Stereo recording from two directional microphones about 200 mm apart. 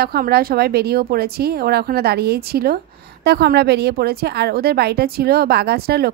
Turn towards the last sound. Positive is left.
turn(degrees=-50)  # may be behind; listen again after turning